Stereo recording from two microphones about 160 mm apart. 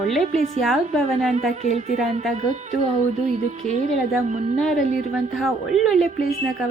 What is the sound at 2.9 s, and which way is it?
Speech, 45° right (ahead or behind).